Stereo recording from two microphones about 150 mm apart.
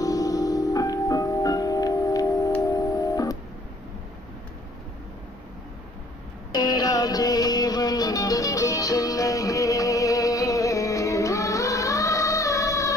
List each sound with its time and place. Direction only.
0.0 s music: 25° left (ahead or behind)
6.5 s music: 25° left (ahead or behind)